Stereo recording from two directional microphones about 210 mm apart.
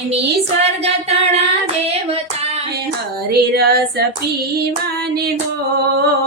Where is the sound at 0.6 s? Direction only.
30° right (ahead or behind).